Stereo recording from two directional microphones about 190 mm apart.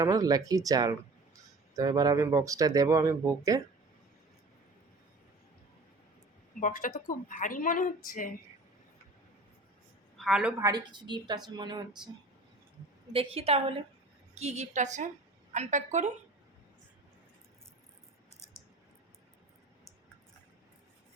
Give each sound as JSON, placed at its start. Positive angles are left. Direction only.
{"t": 0.0, "sound": "speech", "side_deg": -20}
{"t": 6.6, "sound": "a woman's voice", "side_deg": 45}
{"t": 10.2, "sound": "a woman's voice", "side_deg": -5}
{"t": 10.6, "sound": "speech", "side_deg": -20}
{"t": 13.1, "sound": "a woman's voice", "side_deg": -30}